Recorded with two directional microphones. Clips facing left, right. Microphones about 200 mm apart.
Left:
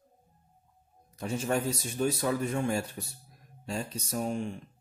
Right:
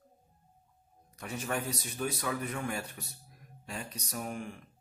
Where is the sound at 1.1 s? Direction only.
25° left (ahead or behind).